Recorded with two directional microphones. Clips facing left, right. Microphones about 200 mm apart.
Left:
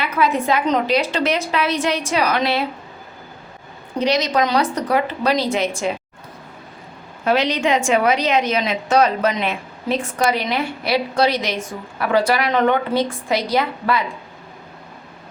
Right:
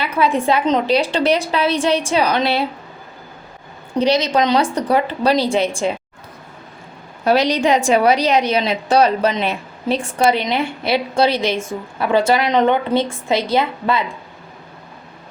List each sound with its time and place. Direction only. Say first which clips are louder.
0.0 s a woman's voice: right 2 dB; 30° right (ahead or behind)
4.0 s a woman's voice: right 2 dB; 30° right (ahead or behind)
7.3 s a woman's voice: right 3 dB; 40° right (ahead or behind)